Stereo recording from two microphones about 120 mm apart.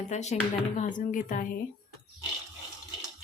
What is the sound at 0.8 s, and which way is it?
Speech, 90° left.